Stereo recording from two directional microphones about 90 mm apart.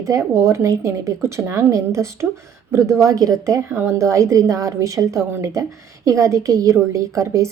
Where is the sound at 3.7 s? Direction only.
25° right (ahead or behind).